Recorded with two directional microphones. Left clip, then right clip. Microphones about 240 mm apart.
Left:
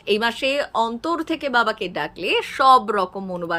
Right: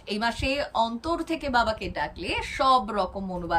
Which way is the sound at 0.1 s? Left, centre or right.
Centre.